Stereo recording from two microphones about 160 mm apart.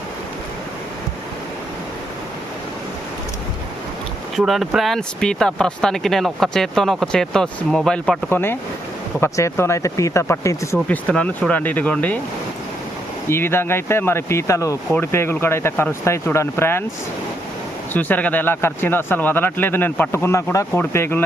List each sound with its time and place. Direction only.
4.4 s speech: centre (ahead or behind); by 10.8 s 20° left (ahead or behind)
10.8 s speech: 10° left (ahead or behind)
13.2 s speech: 15° left (ahead or behind)
17.9 s speech: 10° left (ahead or behind)